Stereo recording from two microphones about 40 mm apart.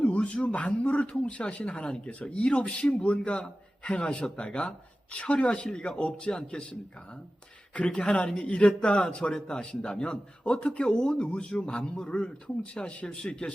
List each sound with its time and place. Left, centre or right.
0.0 s a man's voice: left